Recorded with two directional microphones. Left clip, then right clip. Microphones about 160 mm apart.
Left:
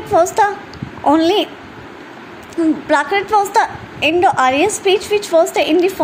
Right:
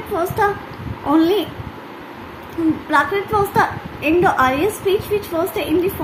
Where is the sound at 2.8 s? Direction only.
50° left (ahead or behind).